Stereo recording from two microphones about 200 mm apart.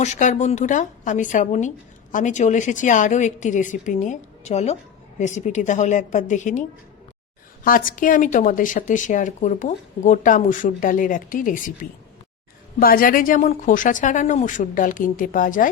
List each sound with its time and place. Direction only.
0.0 s speech: 35° left (ahead or behind)